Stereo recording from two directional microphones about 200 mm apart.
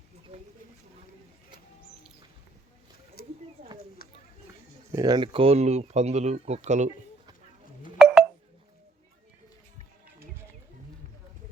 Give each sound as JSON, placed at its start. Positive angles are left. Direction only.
{"t": 3.2, "sound": "a sound", "side_deg": 50}
{"t": 4.9, "sound": "speech", "side_deg": -20}
{"t": 7.9, "sound": "telephone dialing", "side_deg": -5}